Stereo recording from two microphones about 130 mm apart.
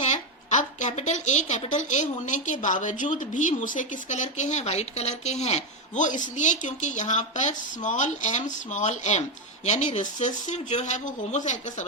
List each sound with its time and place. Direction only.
0.0 s a woman's voice: 65° left (ahead or behind)